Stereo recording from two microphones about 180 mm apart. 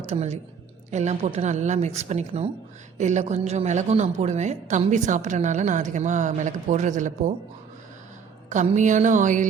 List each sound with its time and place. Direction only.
0.0 s a woman's voice: 40° right (ahead or behind)
8.4 s music: 40° right (ahead or behind)